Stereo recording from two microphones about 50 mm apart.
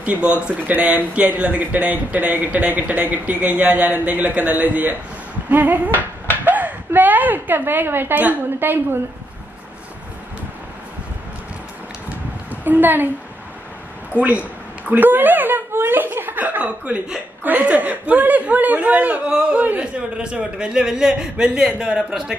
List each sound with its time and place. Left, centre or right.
0.0 s speech: right
6.3 s a sound: right
8.1 s a woman's voice: right
12.4 s a sound: right
14.1 s speech: right
14.9 s chuckle: right
16.8 s speech: right
17.4 s speech: right
19.8 s a man's voice: centre